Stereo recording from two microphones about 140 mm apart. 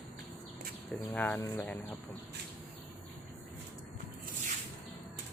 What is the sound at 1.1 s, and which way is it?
Speech, 10° left (ahead or behind).